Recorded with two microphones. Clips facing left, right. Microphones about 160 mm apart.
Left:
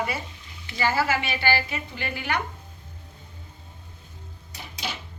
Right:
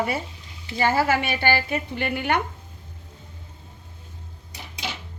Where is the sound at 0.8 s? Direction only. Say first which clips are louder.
Right 3 dB; 50° right (ahead or behind).